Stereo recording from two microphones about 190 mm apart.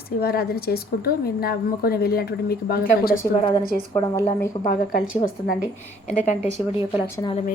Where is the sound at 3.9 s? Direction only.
15° left (ahead or behind).